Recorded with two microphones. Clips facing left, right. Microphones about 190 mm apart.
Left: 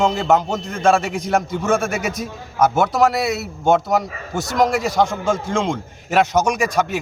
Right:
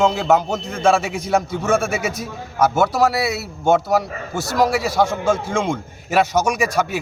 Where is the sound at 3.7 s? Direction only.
5° right (ahead or behind).